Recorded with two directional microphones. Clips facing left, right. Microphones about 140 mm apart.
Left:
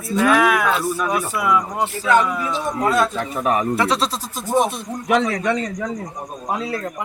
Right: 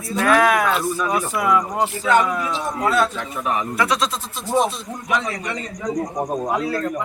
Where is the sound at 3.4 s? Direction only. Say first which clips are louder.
Left 4 dB; 40° left (ahead or behind).